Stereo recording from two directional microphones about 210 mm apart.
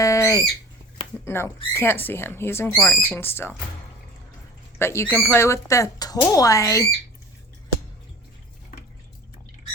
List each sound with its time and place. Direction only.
0.0 s bird: 15° left (ahead or behind)
1.2 s speech: 10° left (ahead or behind)
4.8 s speech: 10° left (ahead or behind)